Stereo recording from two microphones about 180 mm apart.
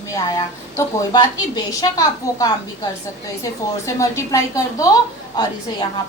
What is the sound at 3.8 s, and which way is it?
A woman's voice, 15° left (ahead or behind).